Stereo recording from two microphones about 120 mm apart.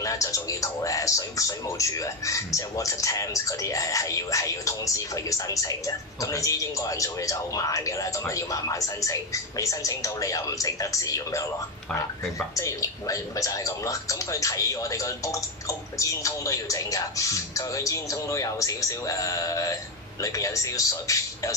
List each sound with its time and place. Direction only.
0.0 s speech: 25° left (ahead or behind)